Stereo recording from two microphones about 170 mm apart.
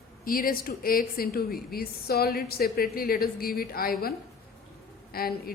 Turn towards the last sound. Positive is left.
turn(degrees=60)  # may be behind; listen again after turning